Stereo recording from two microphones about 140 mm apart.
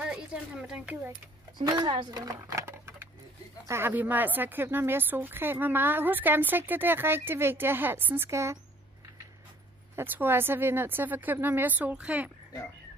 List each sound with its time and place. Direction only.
0.0 s a sound: 10° right (ahead or behind)
1.6 s a woman's voice: 30° right (ahead or behind)
9.9 s a woman's voice: 15° right (ahead or behind)